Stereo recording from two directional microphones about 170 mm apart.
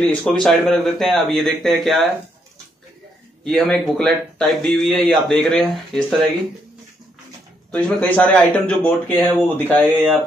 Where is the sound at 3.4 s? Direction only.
Centre (ahead or behind).